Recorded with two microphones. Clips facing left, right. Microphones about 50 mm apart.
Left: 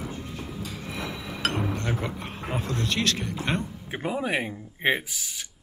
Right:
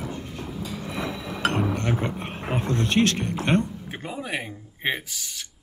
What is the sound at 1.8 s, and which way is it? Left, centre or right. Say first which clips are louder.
Speech: right 3 dB; right.